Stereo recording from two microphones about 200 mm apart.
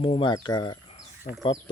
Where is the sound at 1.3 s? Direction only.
45° left (ahead or behind).